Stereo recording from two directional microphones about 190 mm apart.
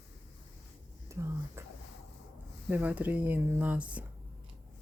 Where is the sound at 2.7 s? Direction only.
10° right (ahead or behind).